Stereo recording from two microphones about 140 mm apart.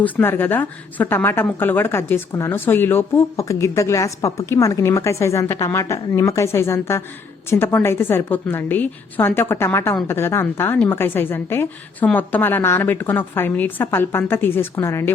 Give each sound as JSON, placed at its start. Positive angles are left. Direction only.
{"t": 0.0, "sound": "a woman's voice", "side_deg": 15}